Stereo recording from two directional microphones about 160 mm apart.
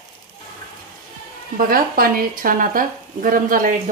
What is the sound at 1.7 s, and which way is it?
Speech, 65° right (ahead or behind).